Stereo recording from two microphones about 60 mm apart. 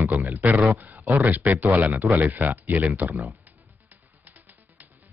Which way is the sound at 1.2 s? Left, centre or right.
Right.